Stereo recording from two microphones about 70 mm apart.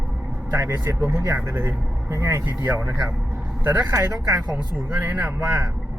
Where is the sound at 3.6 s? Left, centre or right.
Right.